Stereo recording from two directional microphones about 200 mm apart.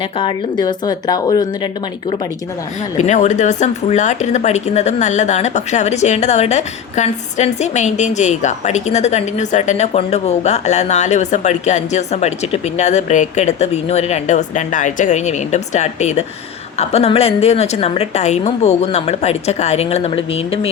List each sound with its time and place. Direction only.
0.2 s speech: 20° left (ahead or behind)
3.0 s speech: 35° left (ahead or behind)